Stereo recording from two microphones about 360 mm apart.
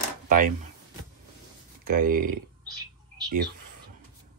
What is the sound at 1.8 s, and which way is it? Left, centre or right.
Speech, right.